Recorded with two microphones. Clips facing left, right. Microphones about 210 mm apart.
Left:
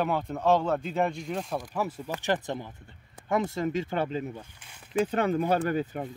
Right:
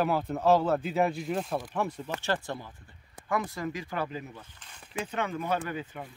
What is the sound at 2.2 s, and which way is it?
Speech, 20° left (ahead or behind).